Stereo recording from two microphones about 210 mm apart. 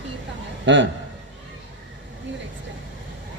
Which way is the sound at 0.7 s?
60° right (ahead or behind).